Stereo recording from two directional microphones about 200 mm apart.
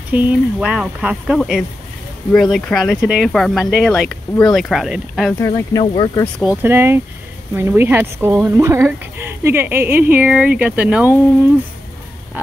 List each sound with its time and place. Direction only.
0.1 s speech: 5° right (ahead or behind)
5.4 s speech: 20° left (ahead or behind)
6.4 s speech: 10° right (ahead or behind)